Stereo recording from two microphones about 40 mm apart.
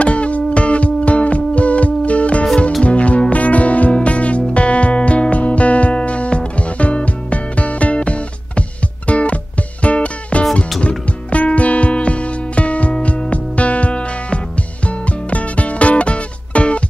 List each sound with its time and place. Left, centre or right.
0.0 s music: left